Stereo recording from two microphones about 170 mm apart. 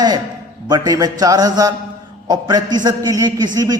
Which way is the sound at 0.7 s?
20° right (ahead or behind).